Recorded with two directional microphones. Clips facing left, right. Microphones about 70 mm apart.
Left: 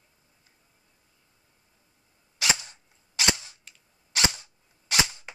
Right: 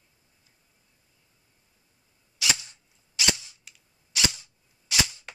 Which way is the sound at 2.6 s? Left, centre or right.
Left.